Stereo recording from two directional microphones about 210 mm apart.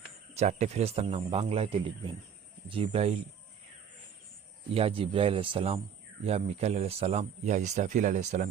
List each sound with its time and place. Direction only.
0.3 s a man's voice: 30° right (ahead or behind)
4.7 s a man's voice: 25° right (ahead or behind)